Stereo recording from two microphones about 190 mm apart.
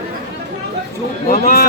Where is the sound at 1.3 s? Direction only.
50° left (ahead or behind).